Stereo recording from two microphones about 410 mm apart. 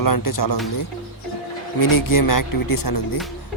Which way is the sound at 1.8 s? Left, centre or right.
Left.